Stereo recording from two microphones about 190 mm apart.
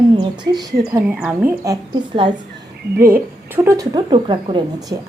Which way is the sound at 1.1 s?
5° right (ahead or behind).